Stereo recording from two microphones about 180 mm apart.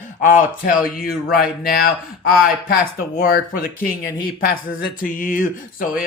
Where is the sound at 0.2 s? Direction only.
50° left (ahead or behind).